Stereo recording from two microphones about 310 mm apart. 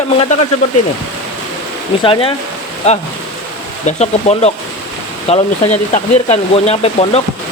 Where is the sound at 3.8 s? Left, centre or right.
Left.